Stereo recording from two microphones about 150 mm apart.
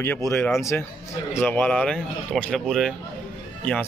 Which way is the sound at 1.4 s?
10° left (ahead or behind).